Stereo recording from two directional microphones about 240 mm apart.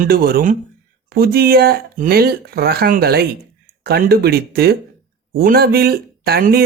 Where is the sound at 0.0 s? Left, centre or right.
Right.